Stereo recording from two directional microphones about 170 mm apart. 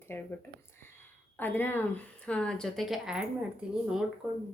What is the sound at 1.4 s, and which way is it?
Speech, 10° left (ahead or behind).